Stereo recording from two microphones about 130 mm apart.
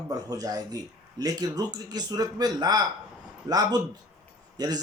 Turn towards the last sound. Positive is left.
turn(degrees=-30)  # may be behind; listen again after turning